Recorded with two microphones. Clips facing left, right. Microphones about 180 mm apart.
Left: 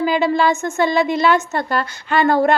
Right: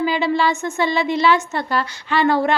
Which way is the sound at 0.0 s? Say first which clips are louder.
Left 2 dB; 50° left (ahead or behind).